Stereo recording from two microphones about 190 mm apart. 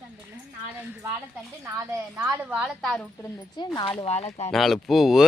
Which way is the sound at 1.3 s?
15° right (ahead or behind).